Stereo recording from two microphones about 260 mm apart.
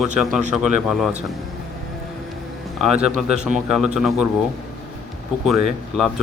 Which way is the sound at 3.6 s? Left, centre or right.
Centre.